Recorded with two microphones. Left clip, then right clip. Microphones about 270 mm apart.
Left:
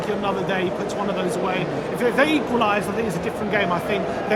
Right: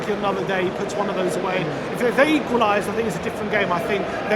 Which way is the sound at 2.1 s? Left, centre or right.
Centre.